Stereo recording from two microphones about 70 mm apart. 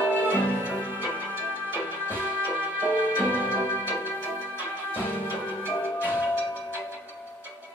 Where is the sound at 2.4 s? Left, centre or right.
Right.